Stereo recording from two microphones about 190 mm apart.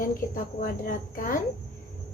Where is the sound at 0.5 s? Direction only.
45° left (ahead or behind).